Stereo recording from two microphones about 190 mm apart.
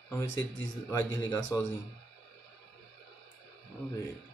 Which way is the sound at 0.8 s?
15° left (ahead or behind).